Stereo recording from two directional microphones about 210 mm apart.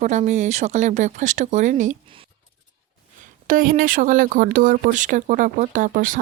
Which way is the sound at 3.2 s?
40° right (ahead or behind).